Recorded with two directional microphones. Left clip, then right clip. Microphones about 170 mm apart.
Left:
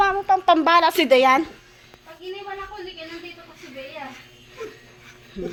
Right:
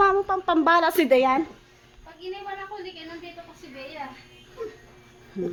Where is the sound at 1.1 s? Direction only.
Centre (ahead or behind).